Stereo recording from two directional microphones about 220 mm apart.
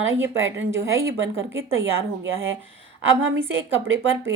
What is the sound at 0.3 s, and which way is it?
Speech, 60° right (ahead or behind).